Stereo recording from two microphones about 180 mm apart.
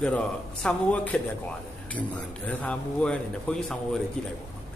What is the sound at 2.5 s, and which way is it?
Speech, 5° left (ahead or behind).